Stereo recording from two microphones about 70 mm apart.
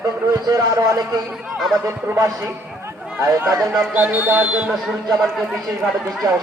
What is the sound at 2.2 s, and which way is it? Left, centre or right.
Speech, right.